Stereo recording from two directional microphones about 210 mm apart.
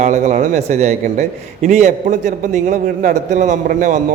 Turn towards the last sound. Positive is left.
turn(degrees=-35)  # may be behind; listen again after turning